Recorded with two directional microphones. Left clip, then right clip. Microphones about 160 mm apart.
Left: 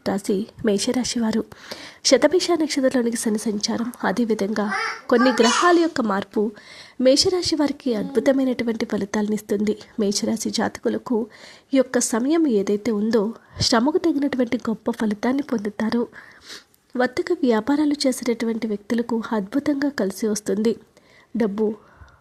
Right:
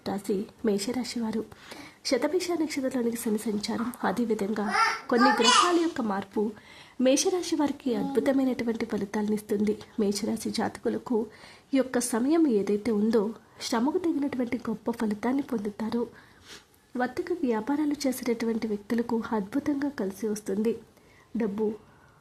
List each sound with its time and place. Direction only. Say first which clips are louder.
0.0 s speech: left 7 dB; 30° left (ahead or behind)
7.0 s speech: left 7 dB; 25° left (ahead or behind)
13.6 s speech: left 9 dB; 40° left (ahead or behind)